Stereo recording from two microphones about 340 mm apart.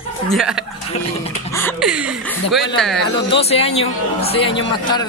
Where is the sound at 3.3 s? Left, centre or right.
Centre.